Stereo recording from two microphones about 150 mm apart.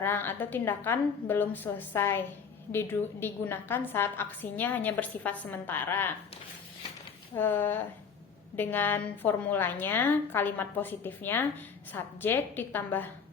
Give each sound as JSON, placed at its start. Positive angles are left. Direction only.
{"t": 0.0, "sound": "a woman's voice", "side_deg": 15}
{"t": 7.3, "sound": "a woman's voice", "side_deg": 15}